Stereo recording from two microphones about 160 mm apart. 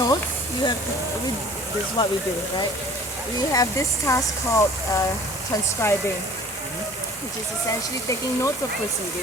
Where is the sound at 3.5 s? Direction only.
20° left (ahead or behind).